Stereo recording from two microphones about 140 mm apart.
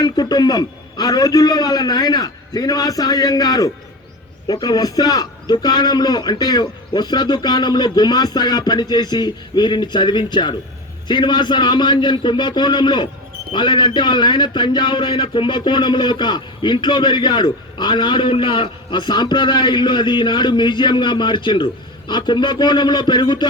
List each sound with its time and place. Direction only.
0.0 s a man's voice: 30° left (ahead or behind)